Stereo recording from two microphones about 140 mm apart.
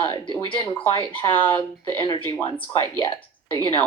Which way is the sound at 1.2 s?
35° left (ahead or behind).